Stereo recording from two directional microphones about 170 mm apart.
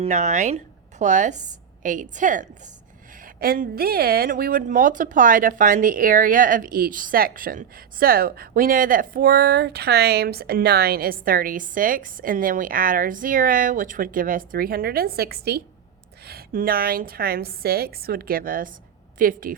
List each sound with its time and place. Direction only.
0.0 s a woman's voice: 45° right (ahead or behind)